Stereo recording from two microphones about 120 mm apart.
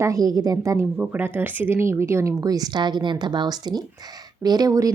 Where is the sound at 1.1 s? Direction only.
15° right (ahead or behind).